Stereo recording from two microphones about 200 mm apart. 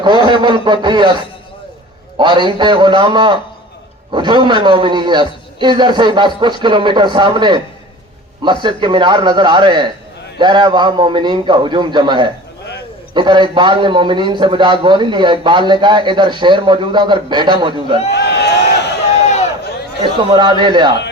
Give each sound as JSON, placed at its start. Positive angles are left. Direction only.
{"t": 0.0, "sound": "a man's voice", "side_deg": -25}
{"t": 2.1, "sound": "a man's voice", "side_deg": -25}
{"t": 8.6, "sound": "a man's voice", "side_deg": -25}
{"t": 18.1, "sound": "a sound", "side_deg": 60}
{"t": 20.1, "sound": "a man's voice", "side_deg": -25}